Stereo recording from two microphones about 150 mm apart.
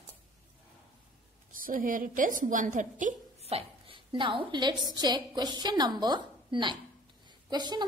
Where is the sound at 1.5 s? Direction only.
65° right (ahead or behind).